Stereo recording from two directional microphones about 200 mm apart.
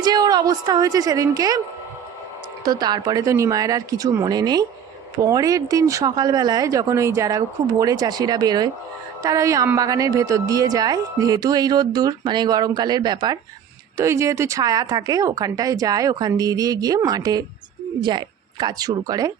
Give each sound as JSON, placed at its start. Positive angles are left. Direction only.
{"t": 0.0, "sound": "a woman's voice", "side_deg": -20}
{"t": 2.6, "sound": "a woman's voice", "side_deg": -20}